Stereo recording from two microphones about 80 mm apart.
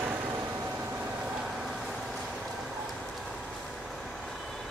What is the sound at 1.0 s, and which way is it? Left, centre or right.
Vehicle, centre.